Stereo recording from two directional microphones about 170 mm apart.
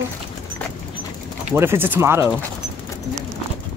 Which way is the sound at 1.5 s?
15° right (ahead or behind).